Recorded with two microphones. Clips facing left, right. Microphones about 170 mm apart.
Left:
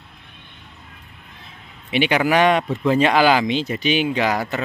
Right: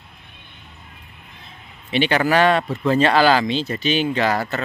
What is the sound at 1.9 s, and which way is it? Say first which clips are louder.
Speech: even; 10° left (ahead or behind).